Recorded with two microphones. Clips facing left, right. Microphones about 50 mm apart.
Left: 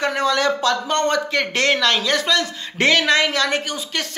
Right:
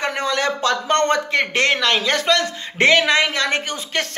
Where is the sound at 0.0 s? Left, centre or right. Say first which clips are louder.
Left 2 dB; right.